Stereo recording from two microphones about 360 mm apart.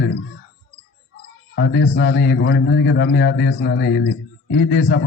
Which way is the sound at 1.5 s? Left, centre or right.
Left.